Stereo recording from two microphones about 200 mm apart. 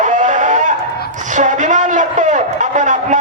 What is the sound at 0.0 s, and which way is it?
Chicken, 40° right (ahead or behind).